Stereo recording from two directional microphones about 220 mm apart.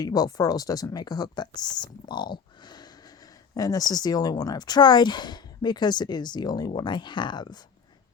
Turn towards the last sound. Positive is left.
turn(degrees=20)  # may be behind; listen again after turning